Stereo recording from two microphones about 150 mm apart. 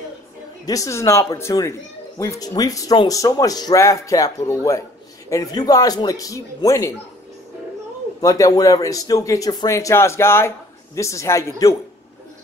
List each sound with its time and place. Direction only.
0.7 s speech: 20° left (ahead or behind)
8.2 s speech: 20° left (ahead or behind)